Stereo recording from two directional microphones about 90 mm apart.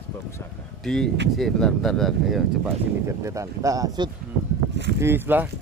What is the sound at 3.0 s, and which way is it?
Speech, 35° right (ahead or behind).